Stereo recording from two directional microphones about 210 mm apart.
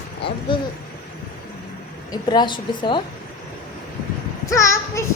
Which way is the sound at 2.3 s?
20° left (ahead or behind).